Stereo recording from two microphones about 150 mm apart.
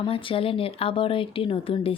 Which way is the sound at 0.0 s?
35° left (ahead or behind).